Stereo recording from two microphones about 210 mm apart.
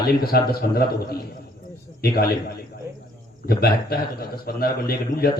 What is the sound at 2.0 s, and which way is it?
A man's voice, 45° left (ahead or behind).